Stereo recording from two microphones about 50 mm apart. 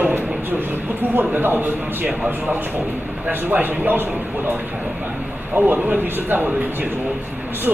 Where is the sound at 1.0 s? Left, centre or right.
Right.